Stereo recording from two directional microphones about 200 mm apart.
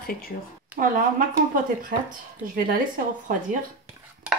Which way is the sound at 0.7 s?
5° right (ahead or behind).